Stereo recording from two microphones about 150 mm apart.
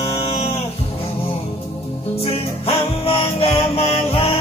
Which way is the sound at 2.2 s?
40° left (ahead or behind).